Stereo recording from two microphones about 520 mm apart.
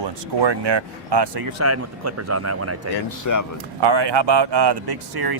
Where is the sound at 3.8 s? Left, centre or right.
Right.